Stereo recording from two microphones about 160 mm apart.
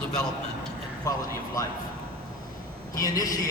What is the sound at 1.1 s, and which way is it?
Speech, 20° left (ahead or behind).